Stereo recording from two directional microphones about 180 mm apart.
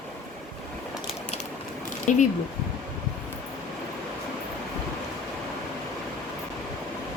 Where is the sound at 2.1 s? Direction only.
45° left (ahead or behind).